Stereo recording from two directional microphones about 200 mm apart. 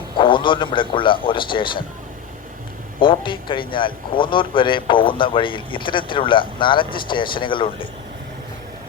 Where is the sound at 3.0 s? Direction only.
25° left (ahead or behind).